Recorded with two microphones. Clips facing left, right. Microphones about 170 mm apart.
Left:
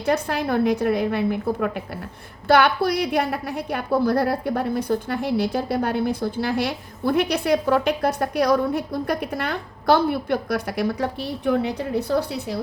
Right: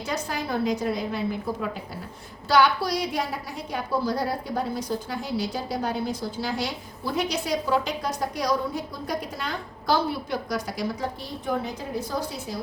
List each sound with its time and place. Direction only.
0.0 s a woman's voice: 60° left (ahead or behind)